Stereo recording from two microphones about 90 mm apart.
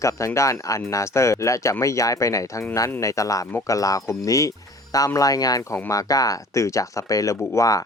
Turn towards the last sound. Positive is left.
turn(degrees=40)  # may be behind; listen again after turning